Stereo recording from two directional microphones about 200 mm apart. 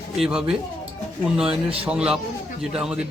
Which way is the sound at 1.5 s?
30° right (ahead or behind).